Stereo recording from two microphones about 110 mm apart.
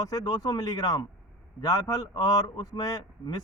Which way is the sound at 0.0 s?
35° left (ahead or behind).